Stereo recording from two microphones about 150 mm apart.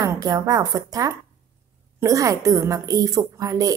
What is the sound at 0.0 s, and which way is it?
A woman's voice, 20° right (ahead or behind).